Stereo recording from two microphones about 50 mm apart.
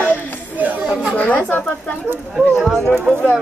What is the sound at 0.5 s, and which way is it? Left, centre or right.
Speech, right.